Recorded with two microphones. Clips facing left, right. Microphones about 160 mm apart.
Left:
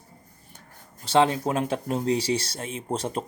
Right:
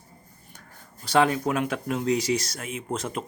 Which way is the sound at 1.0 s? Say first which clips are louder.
Left 1 dB; 25° left (ahead or behind).